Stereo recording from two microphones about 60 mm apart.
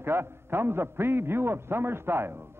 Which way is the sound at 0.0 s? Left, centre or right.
Right.